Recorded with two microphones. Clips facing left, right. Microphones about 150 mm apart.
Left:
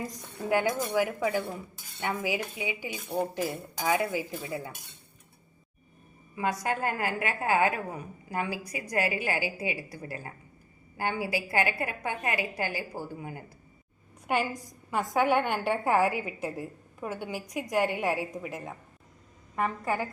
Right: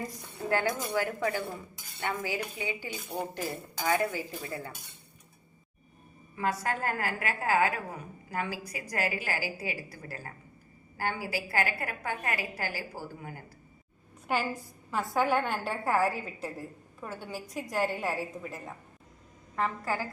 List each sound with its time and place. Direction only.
0.4 s speech: 15° left (ahead or behind)
6.3 s a woman's voice: 20° left (ahead or behind)
14.8 s a woman's voice: 15° left (ahead or behind)